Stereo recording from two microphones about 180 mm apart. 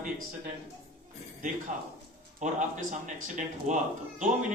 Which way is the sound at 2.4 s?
45° right (ahead or behind).